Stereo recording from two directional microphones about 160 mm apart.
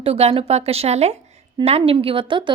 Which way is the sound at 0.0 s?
40° right (ahead or behind).